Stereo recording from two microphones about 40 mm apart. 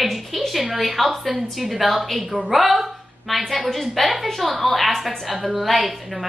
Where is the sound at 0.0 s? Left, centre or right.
Centre.